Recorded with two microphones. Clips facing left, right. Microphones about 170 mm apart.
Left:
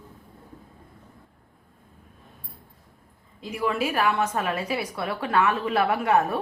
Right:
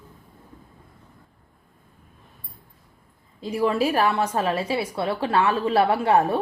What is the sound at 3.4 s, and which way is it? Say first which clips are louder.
A woman's voice: right 4 dB; 30° right (ahead or behind).